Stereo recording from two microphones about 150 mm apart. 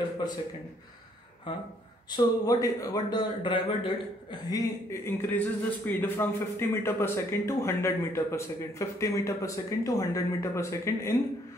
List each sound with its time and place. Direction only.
2.1 s a man's voice: 25° left (ahead or behind)